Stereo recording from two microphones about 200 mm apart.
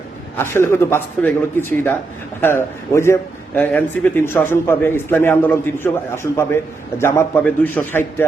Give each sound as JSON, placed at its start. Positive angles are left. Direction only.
{"t": 0.3, "sound": "a man's voice", "side_deg": 10}